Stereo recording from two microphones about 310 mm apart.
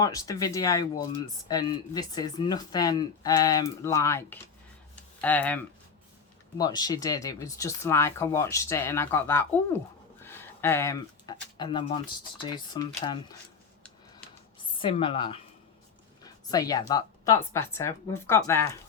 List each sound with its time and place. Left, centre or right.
0.0 s speech: centre
6.6 s speech: centre
14.6 s a woman's voice: centre